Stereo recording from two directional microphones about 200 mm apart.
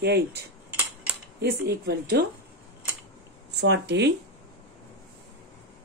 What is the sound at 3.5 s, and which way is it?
Speech, 60° right (ahead or behind).